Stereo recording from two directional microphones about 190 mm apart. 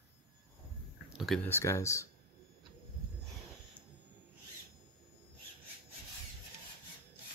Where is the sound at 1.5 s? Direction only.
15° left (ahead or behind).